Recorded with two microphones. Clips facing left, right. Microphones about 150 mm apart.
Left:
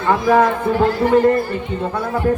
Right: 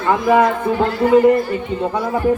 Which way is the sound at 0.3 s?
10° right (ahead or behind).